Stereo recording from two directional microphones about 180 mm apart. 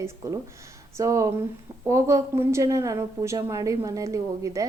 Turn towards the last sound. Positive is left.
turn(degrees=-15)  # may be behind; listen again after turning